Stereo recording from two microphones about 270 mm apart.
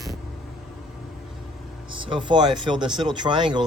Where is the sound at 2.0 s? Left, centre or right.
Centre.